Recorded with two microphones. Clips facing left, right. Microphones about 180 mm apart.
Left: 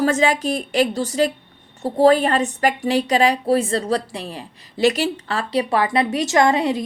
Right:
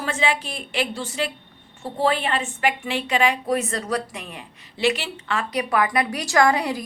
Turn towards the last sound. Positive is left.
turn(degrees=25)  # may be behind; listen again after turning